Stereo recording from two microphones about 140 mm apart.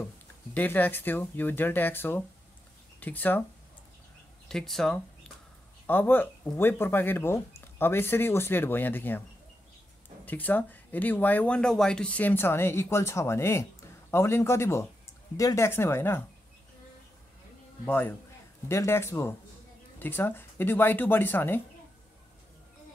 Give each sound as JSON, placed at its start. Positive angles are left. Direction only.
{"t": 0.6, "sound": "speech", "side_deg": 15}
{"t": 4.5, "sound": "speech", "side_deg": 5}
{"t": 5.9, "sound": "speech", "side_deg": 15}
{"t": 10.2, "sound": "a man's voice", "side_deg": 10}
{"t": 17.8, "sound": "speech", "side_deg": 10}